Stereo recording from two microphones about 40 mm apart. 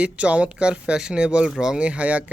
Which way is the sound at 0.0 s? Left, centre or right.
Right.